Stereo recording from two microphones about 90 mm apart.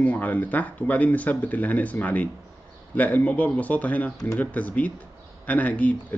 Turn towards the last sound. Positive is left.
turn(degrees=15)  # may be behind; listen again after turning